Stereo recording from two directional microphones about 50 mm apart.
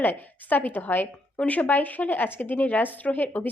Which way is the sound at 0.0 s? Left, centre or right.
Left.